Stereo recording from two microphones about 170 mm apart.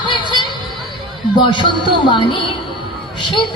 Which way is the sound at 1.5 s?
30° left (ahead or behind).